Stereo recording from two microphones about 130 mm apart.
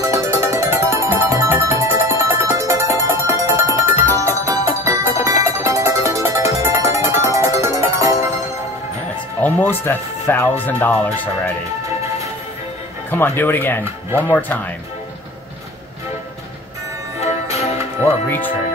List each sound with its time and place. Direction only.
0.0 s music: 25° right (ahead or behind)
9.4 s speech: 15° left (ahead or behind)
13.1 s speech: 15° left (ahead or behind)
17.2 s music: 55° left (ahead or behind)